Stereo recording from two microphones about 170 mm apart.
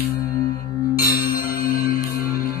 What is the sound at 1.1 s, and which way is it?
Bell, 55° left (ahead or behind).